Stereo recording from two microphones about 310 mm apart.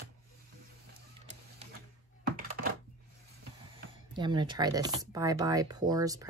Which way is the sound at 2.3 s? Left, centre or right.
Right.